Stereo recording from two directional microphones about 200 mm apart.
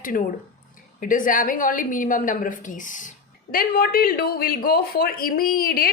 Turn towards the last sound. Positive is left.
turn(degrees=45)  # may be behind; listen again after turning